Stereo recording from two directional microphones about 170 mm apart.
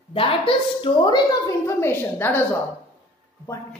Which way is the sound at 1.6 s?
15° left (ahead or behind).